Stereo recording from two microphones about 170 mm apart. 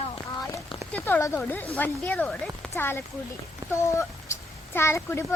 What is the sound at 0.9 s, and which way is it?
A child's voice, 10° left (ahead or behind).